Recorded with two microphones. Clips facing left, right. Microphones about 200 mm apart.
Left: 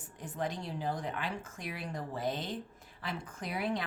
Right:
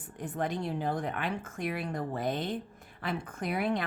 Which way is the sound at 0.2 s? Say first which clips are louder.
Right 4 dB; 60° right (ahead or behind).